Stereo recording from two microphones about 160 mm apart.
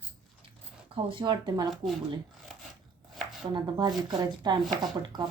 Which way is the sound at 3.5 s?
25° right (ahead or behind).